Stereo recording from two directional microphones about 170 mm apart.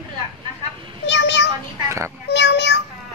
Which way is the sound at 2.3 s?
90° left.